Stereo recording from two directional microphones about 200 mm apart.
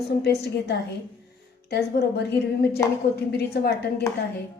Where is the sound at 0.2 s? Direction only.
55° left (ahead or behind).